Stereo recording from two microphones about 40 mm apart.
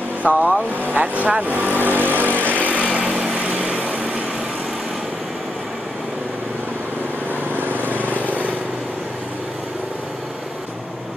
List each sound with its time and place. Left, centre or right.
0.2 s speech: right
1.5 s vehicle: right
2.6 s vehicle: right
2.9 s vehicle: right
3.3 s vehicle: right
3.6 s light engine: right
7.9 s vehicle: right